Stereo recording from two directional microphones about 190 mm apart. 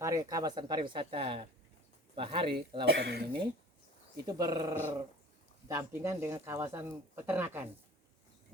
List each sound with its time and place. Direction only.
0.0 s speech: 20° right (ahead or behind)
2.8 s speech: 60° right (ahead or behind)
4.3 s speech: 20° right (ahead or behind)